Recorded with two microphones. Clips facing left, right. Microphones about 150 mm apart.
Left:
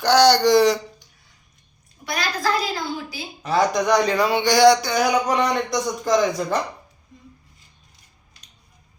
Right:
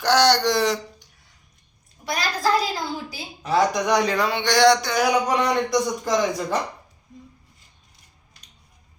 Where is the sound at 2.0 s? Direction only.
40° right (ahead or behind).